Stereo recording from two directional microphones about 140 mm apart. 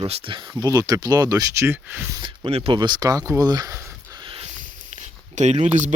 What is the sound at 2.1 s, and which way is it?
Speech, 35° right (ahead or behind).